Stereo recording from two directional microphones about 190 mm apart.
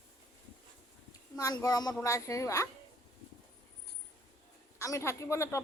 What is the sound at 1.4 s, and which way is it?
Speech, 20° left (ahead or behind).